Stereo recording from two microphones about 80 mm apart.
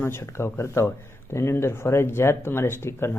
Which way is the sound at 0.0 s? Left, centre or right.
Left.